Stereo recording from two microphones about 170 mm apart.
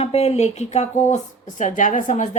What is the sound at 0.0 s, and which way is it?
Speech, 40° left (ahead or behind).